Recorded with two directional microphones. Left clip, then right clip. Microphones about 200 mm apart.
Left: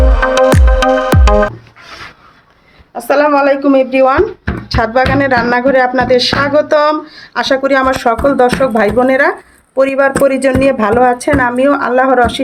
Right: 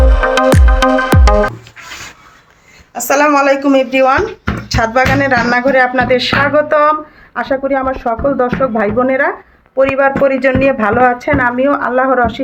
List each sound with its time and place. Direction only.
0.3 s music: centre (ahead or behind)
2.9 s speech: 20° left (ahead or behind)
4.7 s music: 20° left (ahead or behind)